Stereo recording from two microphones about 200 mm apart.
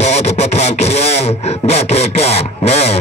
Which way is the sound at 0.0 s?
35° left (ahead or behind).